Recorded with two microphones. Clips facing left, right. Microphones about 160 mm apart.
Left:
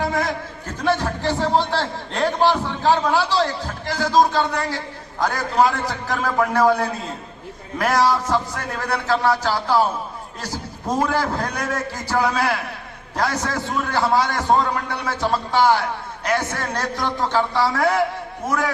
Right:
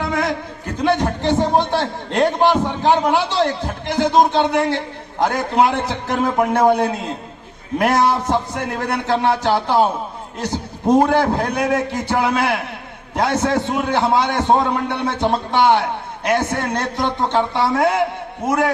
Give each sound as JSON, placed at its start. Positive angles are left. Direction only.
{"t": 0.0, "sound": "a sound", "side_deg": -65}
{"t": 0.8, "sound": "a man's voice", "side_deg": -20}
{"t": 10.4, "sound": "a man's voice", "side_deg": -20}